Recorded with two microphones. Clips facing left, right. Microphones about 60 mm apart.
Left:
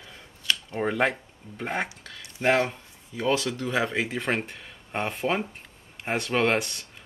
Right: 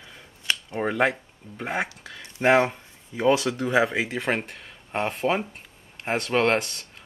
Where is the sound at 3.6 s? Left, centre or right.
Centre.